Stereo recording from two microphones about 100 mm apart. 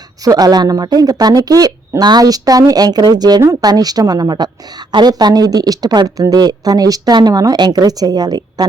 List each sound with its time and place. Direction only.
0.3 s speech: 40° right (ahead or behind)